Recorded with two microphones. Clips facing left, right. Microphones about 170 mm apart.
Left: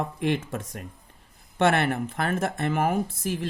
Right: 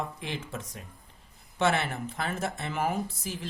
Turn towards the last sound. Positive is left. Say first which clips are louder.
# left 6 dB
turn(degrees=55)  # may be behind; listen again after turning